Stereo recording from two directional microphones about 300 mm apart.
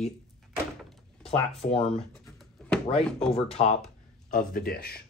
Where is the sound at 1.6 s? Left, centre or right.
Centre.